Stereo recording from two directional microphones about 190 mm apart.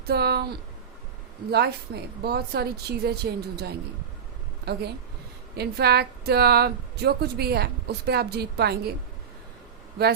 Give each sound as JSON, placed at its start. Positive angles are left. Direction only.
{"t": 0.1, "sound": "a woman's voice", "side_deg": -55}